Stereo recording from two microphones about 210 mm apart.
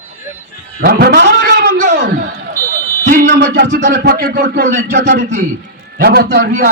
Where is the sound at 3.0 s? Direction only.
45° right (ahead or behind).